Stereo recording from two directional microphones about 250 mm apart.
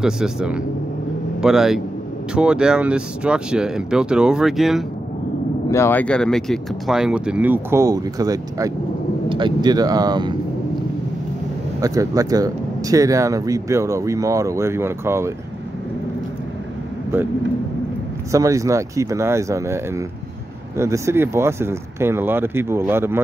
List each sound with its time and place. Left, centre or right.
0.0 s speech: centre
5.7 s speech: centre
11.8 s speech: centre
18.3 s speech: centre